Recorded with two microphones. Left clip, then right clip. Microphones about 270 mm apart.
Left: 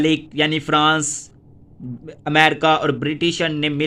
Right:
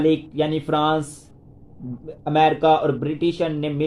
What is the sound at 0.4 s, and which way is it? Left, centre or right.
Speech, left.